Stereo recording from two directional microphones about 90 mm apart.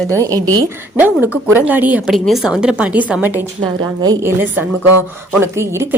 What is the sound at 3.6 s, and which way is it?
Speech, 50° right (ahead or behind).